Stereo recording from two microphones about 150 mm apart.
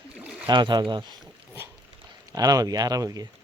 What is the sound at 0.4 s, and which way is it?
Speech, 30° right (ahead or behind).